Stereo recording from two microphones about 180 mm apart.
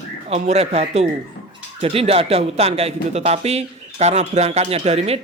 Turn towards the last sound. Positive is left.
turn(degrees=-35)  # may be behind; listen again after turning